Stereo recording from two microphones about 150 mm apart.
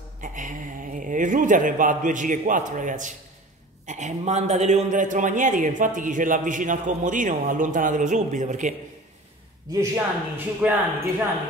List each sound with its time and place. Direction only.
0.2 s a man's voice: 60° right (ahead or behind)
9.7 s speech: 15° right (ahead or behind)